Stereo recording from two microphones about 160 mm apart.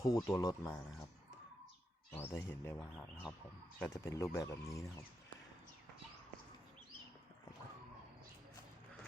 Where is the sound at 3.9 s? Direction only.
15° left (ahead or behind).